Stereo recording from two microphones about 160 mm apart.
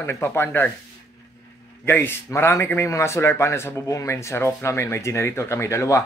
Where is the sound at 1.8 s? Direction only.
15° left (ahead or behind).